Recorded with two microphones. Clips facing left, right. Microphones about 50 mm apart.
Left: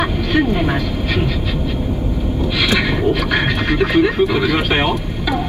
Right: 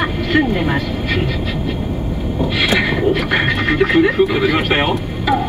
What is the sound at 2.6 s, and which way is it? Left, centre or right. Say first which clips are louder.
Speech: right 1 dB; right.